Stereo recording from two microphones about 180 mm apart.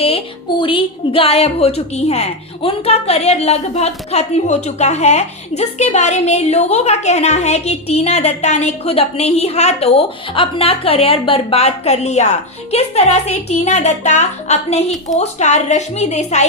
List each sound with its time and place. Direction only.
0.6 s a woman's voice: 30° left (ahead or behind)